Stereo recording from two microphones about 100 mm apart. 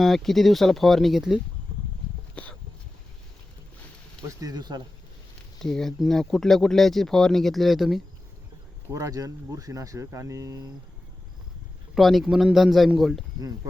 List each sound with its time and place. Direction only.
0.0 s speech: centre (ahead or behind)
2.3 s a sound: 15° left (ahead or behind)
4.4 s speech: 40° right (ahead or behind)
5.5 s speech: 5° left (ahead or behind)
8.9 s speech: 35° right (ahead or behind)
11.9 s speech: centre (ahead or behind)